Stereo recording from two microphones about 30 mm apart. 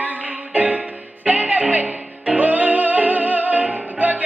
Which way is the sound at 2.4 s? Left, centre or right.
Right.